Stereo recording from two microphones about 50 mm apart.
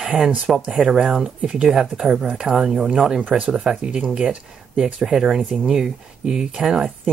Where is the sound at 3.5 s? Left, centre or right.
Centre.